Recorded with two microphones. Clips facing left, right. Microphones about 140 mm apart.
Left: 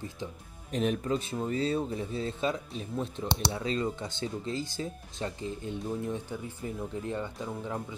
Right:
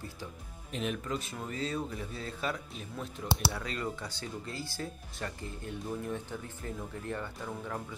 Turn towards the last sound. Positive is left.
turn(degrees=15)  # may be behind; listen again after turning